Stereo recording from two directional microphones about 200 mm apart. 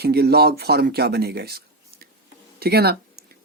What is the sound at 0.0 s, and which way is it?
Speech, 50° right (ahead or behind).